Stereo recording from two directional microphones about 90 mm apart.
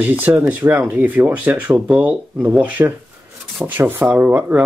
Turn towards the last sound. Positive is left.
turn(degrees=-20)  # may be behind; listen again after turning